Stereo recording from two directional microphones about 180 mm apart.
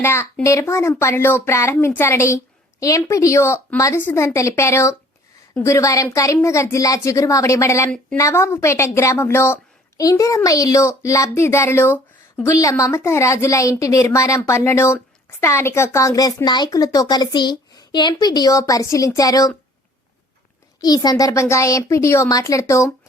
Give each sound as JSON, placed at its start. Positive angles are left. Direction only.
{"t": 0.0, "sound": "a woman's voice", "side_deg": 15}
{"t": 20.8, "sound": "a woman's voice", "side_deg": 20}